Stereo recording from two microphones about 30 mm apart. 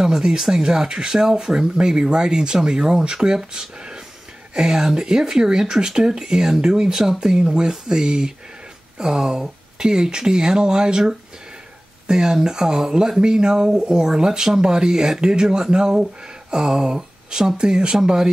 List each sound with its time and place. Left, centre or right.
0.0 s speech: right